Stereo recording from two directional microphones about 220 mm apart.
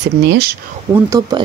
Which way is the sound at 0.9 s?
15° right (ahead or behind).